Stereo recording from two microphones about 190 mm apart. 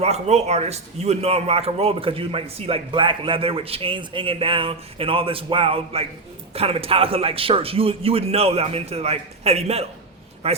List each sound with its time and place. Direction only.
0.0 s a man's voice: 35° right (ahead or behind)